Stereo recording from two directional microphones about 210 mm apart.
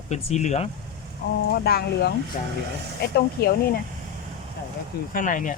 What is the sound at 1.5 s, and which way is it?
Speech, 45° left (ahead or behind).